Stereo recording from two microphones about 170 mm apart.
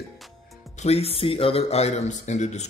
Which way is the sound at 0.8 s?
35° left (ahead or behind).